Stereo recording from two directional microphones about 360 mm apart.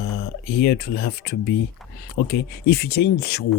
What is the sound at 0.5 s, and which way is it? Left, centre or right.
Speech, left.